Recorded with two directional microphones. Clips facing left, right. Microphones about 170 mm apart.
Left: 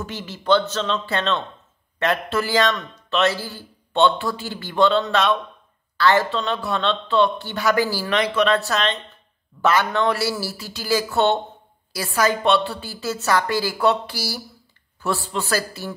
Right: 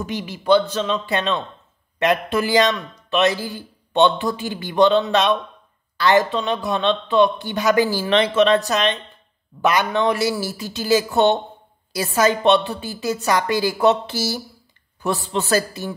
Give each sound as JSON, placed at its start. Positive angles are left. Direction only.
{"t": 0.0, "sound": "a man's voice", "side_deg": -15}